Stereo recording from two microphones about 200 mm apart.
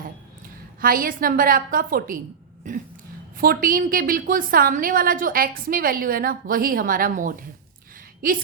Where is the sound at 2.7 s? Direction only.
40° right (ahead or behind).